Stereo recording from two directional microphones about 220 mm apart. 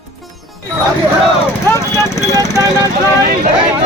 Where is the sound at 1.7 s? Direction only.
15° left (ahead or behind).